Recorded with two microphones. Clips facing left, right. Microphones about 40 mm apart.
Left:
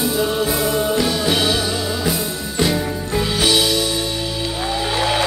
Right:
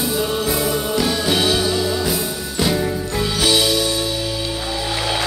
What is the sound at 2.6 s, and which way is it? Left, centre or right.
Music, centre.